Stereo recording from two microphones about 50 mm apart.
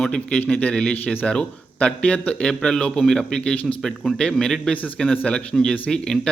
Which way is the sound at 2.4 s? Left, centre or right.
Centre.